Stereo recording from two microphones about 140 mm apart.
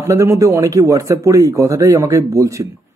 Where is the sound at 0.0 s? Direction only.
20° right (ahead or behind).